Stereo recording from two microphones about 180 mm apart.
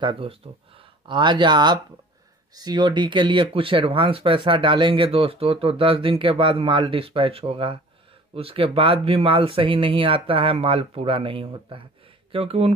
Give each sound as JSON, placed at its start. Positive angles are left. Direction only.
{"t": 0.0, "sound": "speech", "side_deg": -30}